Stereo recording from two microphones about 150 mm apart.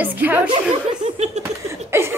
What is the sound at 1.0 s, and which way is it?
Laughter, 45° right (ahead or behind).